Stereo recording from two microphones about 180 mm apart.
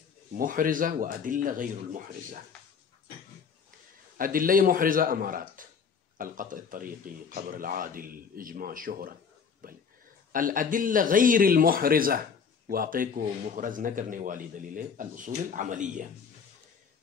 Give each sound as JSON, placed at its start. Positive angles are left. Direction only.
{"t": 0.4, "sound": "a man's voice", "side_deg": -50}
{"t": 4.2, "sound": "a man's voice", "side_deg": -50}